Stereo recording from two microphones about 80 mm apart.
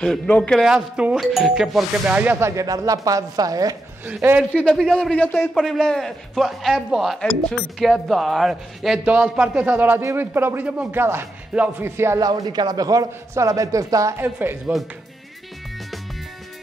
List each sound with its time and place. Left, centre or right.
0.0 s speech: centre
0.6 s speech: centre
1.3 s a man's voice: centre
2.0 s speech: centre
2.4 s speech: right
4.2 s speech: centre
4.7 s speech: centre
5.5 s a man's voice: centre
7.2 s speech: centre
7.8 s a man's voice: centre
9.4 s speech: centre; by 12.2 s right
12.2 s speech: right
14.1 s speech: right